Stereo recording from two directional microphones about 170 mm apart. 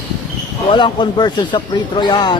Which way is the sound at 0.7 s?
25° left (ahead or behind).